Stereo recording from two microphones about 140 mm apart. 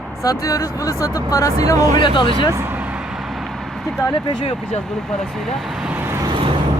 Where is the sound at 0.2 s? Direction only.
25° left (ahead or behind).